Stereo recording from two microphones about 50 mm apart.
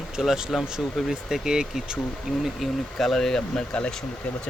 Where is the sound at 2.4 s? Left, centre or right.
Centre.